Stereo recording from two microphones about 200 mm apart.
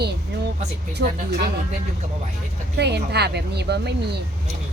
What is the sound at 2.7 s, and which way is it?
Speech, 55° right (ahead or behind).